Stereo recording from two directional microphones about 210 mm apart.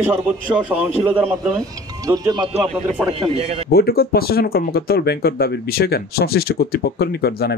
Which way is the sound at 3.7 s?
45° left (ahead or behind).